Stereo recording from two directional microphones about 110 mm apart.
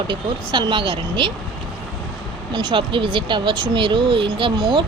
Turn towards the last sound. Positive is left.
turn(degrees=-45)  # may be behind; listen again after turning